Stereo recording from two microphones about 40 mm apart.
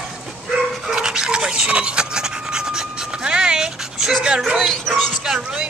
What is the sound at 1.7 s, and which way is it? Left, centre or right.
Rub, right.